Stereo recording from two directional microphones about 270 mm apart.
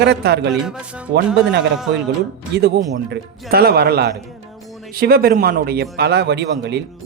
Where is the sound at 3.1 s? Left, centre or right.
Right.